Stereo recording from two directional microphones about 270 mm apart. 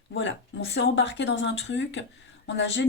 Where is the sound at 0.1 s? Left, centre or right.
Left.